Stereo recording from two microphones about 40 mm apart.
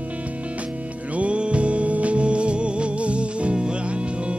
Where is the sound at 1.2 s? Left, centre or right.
Right.